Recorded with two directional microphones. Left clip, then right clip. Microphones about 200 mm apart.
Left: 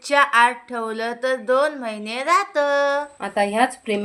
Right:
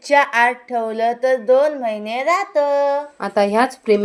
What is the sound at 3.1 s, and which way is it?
Speech, 30° right (ahead or behind).